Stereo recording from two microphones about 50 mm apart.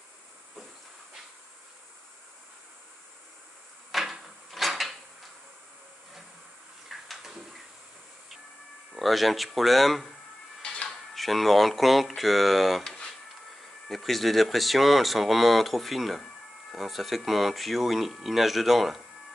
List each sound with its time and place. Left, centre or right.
3.9 s drawer open or close: centre
6.9 s a sound: centre
8.9 s speech: centre
10.6 s music: centre
10.9 s speech: centre